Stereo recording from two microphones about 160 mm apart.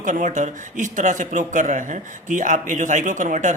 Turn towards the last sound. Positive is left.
turn(degrees=-50)  # may be behind; listen again after turning